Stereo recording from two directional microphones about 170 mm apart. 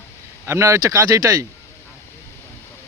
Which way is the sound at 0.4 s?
15° right (ahead or behind).